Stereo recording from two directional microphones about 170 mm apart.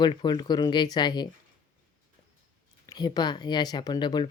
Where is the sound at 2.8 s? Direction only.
25° left (ahead or behind).